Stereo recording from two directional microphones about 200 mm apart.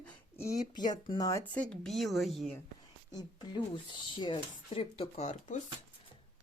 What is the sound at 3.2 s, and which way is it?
Speech, 20° left (ahead or behind).